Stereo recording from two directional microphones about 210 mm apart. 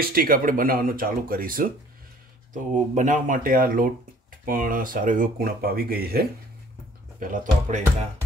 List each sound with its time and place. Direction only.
0.0 s speech: 45° right (ahead or behind)